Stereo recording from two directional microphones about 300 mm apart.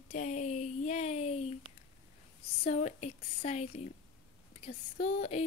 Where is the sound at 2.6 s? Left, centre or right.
Left.